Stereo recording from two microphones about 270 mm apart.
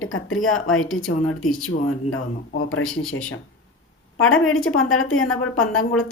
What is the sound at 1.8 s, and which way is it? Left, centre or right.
A woman's voice, left.